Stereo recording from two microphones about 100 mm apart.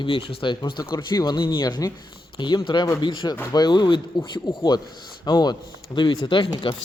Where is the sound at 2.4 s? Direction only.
55° left (ahead or behind).